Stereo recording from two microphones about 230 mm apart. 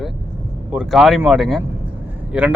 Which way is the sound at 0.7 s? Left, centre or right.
Centre.